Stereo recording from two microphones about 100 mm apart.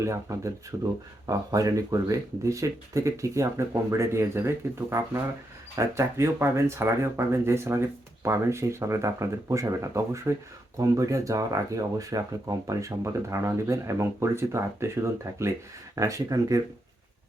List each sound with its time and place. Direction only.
0.0 s speech: 30° right (ahead or behind)